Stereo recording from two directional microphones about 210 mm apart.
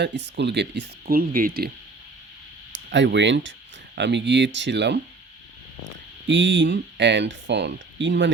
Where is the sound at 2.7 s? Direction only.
60° right (ahead or behind).